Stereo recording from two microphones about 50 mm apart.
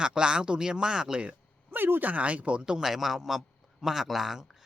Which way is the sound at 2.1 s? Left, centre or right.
Right.